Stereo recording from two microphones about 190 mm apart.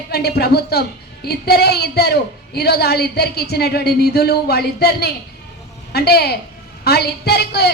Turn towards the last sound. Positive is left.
turn(degrees=60)  # may be behind; listen again after turning